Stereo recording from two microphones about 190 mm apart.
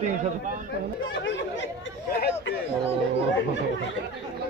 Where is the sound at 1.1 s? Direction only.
70° left (ahead or behind).